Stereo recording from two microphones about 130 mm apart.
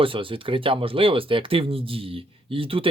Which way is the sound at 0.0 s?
40° right (ahead or behind).